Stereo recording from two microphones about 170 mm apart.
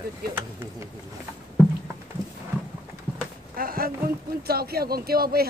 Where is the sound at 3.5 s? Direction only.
60° right (ahead or behind).